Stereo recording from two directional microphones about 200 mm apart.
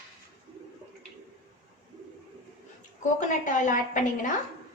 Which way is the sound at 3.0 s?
40° left (ahead or behind).